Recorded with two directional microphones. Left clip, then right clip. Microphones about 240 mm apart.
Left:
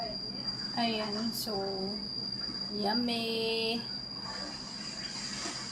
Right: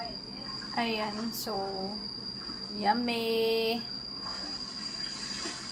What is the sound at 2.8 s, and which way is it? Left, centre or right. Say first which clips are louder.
A woman's voice: right 4 dB; centre.